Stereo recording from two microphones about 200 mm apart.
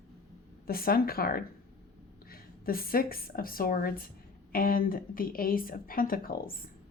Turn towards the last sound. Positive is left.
turn(degrees=45)  # may be behind; listen again after turning